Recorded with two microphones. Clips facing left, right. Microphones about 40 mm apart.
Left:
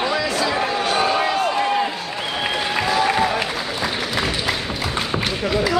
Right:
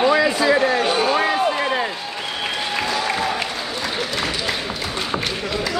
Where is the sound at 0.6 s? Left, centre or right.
Centre.